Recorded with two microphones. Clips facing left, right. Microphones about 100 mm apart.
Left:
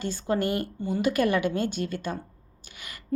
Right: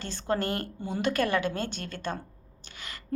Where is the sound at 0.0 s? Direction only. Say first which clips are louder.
Left 3 dB; 15° left (ahead or behind).